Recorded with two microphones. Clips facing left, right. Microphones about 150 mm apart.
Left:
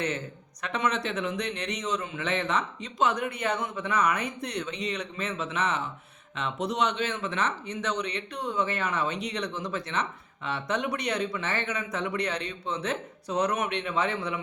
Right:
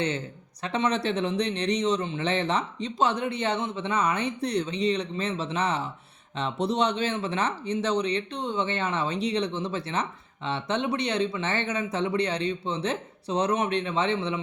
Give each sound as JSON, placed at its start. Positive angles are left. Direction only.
{"t": 0.6, "sound": "speech", "side_deg": -30}